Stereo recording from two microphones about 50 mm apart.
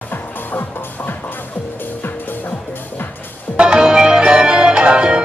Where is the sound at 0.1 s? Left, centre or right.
Left.